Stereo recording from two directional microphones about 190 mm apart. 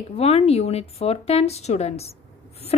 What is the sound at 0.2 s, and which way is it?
A woman's voice, 35° left (ahead or behind).